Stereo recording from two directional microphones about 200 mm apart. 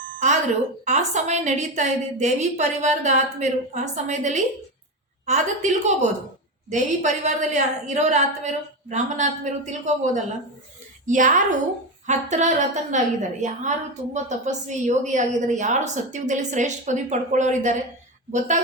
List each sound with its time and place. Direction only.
0.9 s a woman's voice: 35° right (ahead or behind)